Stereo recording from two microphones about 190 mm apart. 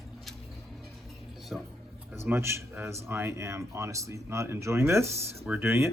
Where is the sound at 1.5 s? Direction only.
5° right (ahead or behind).